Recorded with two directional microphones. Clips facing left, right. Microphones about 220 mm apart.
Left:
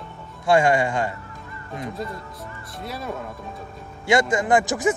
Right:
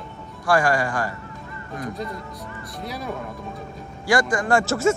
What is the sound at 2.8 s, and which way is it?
Speech, centre (ahead or behind).